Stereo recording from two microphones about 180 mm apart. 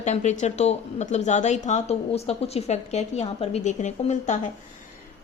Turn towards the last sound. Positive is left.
turn(degrees=40)  # may be behind; listen again after turning